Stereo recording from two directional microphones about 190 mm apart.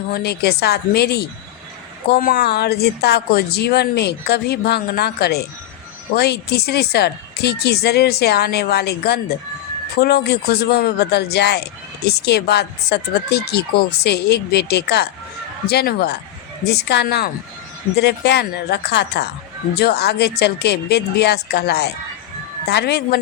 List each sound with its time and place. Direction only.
0.1 s speech: 55° left (ahead or behind)